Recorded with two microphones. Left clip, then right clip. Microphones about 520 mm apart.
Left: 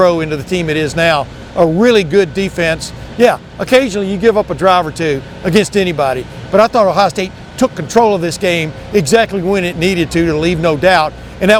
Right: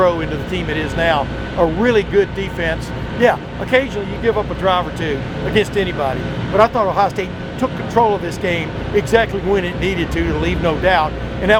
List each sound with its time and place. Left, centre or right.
0.0 s speech: left
6.6 s speech: left
7.9 s speech: left